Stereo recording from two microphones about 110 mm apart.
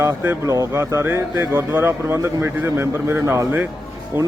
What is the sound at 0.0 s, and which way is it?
Speech, 25° right (ahead or behind).